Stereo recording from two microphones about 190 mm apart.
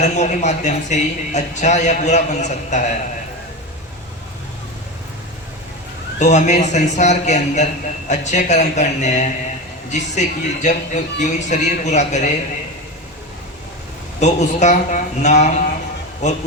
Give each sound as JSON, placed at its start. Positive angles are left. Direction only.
{"t": 0.0, "sound": "speech", "side_deg": 40}
{"t": 6.3, "sound": "speech", "side_deg": 40}
{"t": 14.2, "sound": "speech", "side_deg": 40}